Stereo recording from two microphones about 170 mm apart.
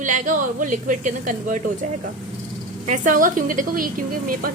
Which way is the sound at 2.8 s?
50° right (ahead or behind).